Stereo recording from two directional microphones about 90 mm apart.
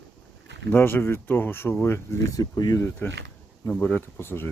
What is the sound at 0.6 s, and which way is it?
Speech, 25° left (ahead or behind).